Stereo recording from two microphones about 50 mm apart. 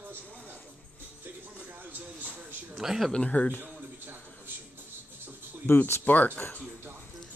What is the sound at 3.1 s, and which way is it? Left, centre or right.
Speech, left.